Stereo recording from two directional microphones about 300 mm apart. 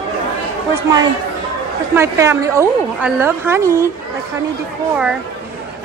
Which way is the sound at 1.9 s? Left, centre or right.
Centre.